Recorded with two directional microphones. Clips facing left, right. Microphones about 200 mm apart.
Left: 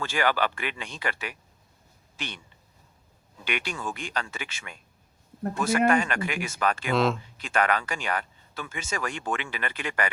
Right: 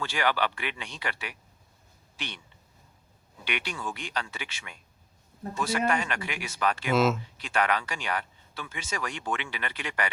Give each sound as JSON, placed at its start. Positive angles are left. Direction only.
{"t": 0.0, "sound": "speech", "side_deg": 50}
{"t": 3.4, "sound": "speech", "side_deg": 45}
{"t": 6.9, "sound": "speech", "side_deg": -5}
{"t": 7.4, "sound": "speech", "side_deg": 50}